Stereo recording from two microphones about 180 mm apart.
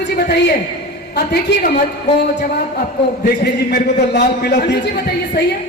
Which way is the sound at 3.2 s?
60° left (ahead or behind).